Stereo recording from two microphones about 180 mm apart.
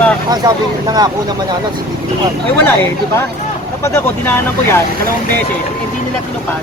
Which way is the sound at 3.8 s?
15° left (ahead or behind).